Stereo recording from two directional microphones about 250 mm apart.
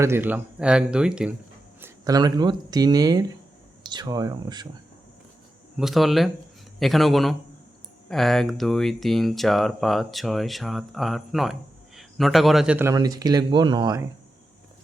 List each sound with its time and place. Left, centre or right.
0.0 s speech: centre
1.8 s speech: centre
5.7 s speech: centre